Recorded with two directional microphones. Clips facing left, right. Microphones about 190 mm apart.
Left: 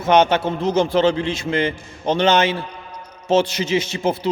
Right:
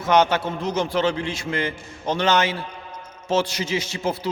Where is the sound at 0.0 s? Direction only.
25° left (ahead or behind).